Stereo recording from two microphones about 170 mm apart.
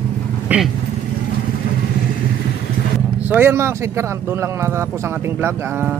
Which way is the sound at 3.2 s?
15° right (ahead or behind).